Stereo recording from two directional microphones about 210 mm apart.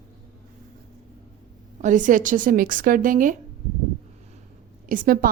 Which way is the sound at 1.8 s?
35° right (ahead or behind).